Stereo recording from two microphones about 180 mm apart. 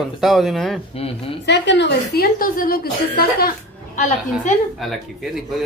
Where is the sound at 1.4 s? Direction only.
75° left (ahead or behind); by 3.5 s 55° left (ahead or behind).